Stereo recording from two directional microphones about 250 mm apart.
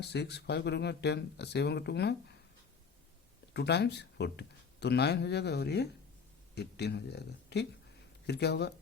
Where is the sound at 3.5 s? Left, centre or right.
Left.